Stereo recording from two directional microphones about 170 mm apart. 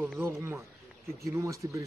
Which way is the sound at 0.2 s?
15° right (ahead or behind).